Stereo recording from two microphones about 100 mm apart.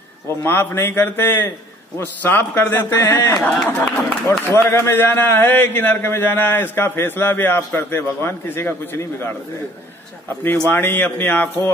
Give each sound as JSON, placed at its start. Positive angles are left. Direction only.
{"t": 0.4, "sound": "a man's voice", "side_deg": 20}
{"t": 3.6, "sound": "a sound", "side_deg": 15}
{"t": 4.3, "sound": "a man's voice", "side_deg": 25}
{"t": 10.7, "sound": "speech", "side_deg": 15}